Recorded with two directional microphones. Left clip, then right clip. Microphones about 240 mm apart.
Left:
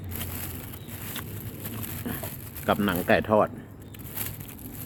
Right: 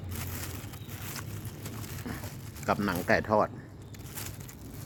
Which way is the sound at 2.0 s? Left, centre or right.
Centre.